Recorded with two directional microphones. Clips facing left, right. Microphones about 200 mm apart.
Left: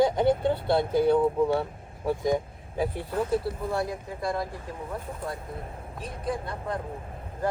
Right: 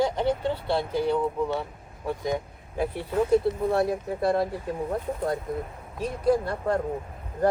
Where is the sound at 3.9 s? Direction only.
55° right (ahead or behind).